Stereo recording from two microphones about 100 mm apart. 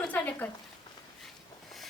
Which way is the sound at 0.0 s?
15° left (ahead or behind).